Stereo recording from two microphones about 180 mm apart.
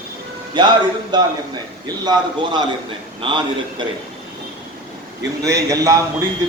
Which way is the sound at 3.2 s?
30° right (ahead or behind).